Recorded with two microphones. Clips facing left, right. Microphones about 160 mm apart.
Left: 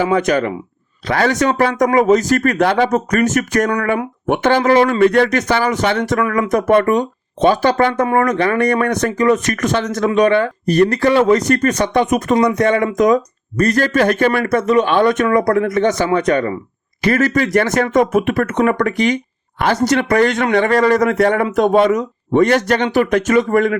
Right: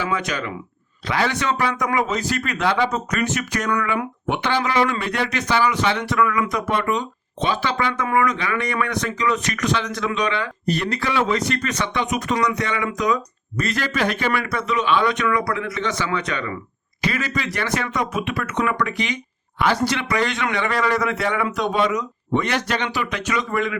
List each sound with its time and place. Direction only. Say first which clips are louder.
0.0 s speech: left 10 dB; 45° left (ahead or behind)